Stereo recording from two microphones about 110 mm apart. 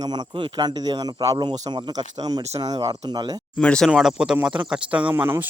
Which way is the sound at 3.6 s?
10° left (ahead or behind).